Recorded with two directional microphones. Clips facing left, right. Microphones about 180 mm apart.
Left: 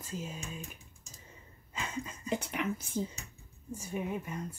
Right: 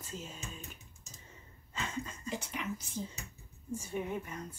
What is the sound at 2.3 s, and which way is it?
Speech, 60° left (ahead or behind).